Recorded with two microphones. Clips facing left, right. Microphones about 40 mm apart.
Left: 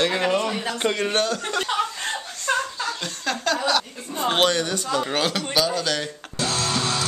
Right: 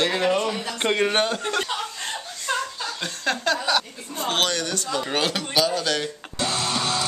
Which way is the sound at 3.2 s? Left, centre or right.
Centre.